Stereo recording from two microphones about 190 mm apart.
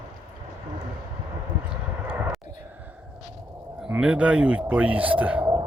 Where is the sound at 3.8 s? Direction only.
5° right (ahead or behind).